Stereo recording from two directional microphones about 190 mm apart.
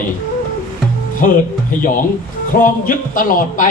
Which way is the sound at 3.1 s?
45° left (ahead or behind).